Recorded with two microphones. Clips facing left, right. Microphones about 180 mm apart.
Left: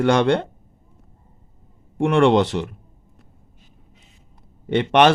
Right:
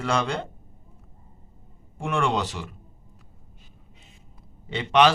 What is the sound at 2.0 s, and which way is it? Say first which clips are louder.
Speech: left 10 dB; 60° left (ahead or behind).